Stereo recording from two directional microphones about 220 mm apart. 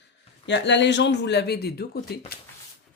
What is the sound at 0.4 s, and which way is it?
Speech, 55° left (ahead or behind).